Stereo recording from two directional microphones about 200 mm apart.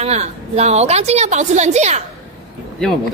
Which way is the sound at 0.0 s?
35° right (ahead or behind).